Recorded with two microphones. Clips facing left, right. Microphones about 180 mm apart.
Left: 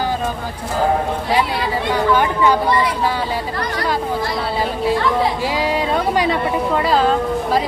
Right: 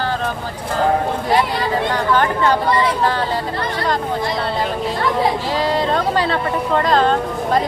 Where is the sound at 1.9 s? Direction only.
10° left (ahead or behind).